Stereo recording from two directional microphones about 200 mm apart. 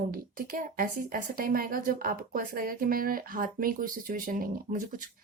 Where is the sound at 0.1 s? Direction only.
45° right (ahead or behind).